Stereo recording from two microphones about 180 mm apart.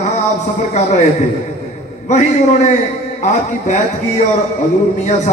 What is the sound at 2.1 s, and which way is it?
A man's voice, 40° left (ahead or behind).